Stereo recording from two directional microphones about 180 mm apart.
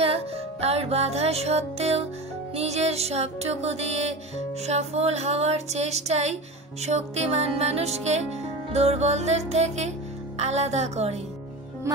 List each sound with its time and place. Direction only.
0.0 s music: 35° right (ahead or behind)